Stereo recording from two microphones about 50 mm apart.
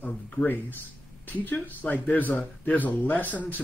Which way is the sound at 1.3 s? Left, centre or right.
Left.